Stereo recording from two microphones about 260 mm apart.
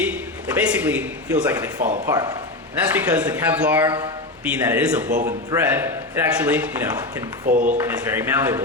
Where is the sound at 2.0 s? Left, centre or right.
Centre.